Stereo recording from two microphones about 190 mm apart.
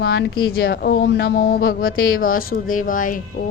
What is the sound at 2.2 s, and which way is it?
Speech, 50° left (ahead or behind).